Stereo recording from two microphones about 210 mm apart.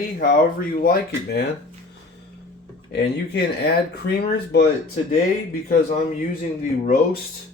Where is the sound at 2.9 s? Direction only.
50° left (ahead or behind).